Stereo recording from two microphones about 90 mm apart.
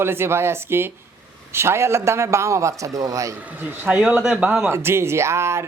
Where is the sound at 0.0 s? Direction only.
25° right (ahead or behind).